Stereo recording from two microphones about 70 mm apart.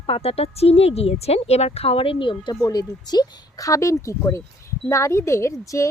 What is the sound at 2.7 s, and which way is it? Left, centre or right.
A woman's voice, left.